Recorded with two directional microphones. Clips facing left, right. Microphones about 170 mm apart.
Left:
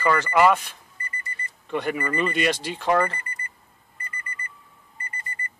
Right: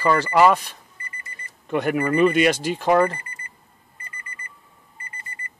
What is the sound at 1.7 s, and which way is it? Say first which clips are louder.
Speech: right 5 dB; 50° right (ahead or behind).